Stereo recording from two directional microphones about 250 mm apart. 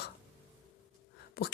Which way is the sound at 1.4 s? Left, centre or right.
Left.